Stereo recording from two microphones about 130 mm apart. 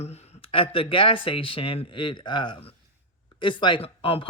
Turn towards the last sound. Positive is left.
turn(degrees=45)  # may be behind; listen again after turning